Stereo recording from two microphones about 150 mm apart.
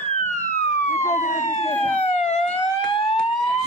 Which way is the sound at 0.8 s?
50° left (ahead or behind).